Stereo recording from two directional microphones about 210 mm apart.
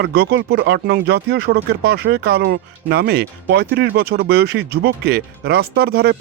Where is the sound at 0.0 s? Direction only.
50° right (ahead or behind).